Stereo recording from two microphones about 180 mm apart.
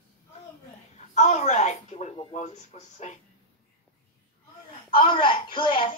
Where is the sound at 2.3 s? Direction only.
40° left (ahead or behind).